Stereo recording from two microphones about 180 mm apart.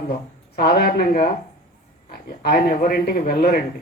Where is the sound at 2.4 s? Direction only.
55° left (ahead or behind).